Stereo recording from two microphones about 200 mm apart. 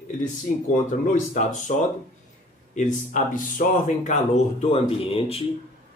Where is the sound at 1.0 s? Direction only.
40° left (ahead or behind).